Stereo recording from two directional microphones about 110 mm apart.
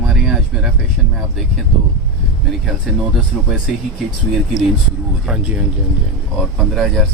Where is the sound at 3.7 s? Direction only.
5° right (ahead or behind).